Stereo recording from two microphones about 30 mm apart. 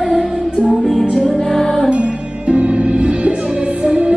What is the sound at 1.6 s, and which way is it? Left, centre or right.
Music, left.